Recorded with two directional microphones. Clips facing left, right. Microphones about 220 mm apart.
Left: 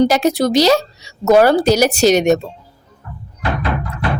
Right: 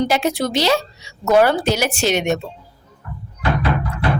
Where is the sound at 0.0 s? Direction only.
40° left (ahead or behind).